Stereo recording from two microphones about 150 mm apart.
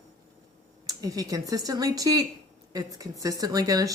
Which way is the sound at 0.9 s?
25° right (ahead or behind).